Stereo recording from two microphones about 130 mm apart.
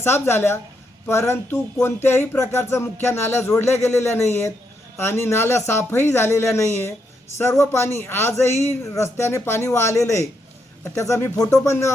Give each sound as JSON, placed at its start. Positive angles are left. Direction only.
{"t": 0.0, "sound": "speech", "side_deg": 20}